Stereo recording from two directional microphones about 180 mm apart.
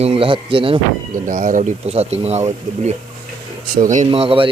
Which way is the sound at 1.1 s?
45° right (ahead or behind).